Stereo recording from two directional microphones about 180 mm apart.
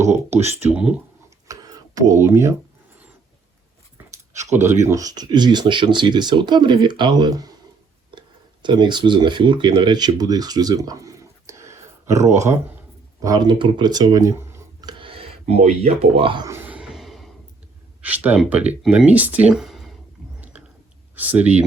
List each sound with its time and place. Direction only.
0.3 s speech: 35° right (ahead or behind)
0.6 s speech: 5° right (ahead or behind)
1.5 s a sound: 20° right (ahead or behind)
4.4 s speech: 40° right (ahead or behind)
4.6 s speech: 15° right (ahead or behind)
8.6 s speech: 25° right (ahead or behind)
13.2 s speech: 20° right (ahead or behind)
16.5 s a sound: 5° right (ahead or behind)
18.0 s speech: 10° right (ahead or behind)
21.2 s speech: 10° right (ahead or behind)